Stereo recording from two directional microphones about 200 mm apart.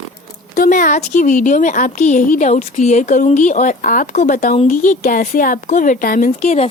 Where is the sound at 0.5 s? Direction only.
40° left (ahead or behind).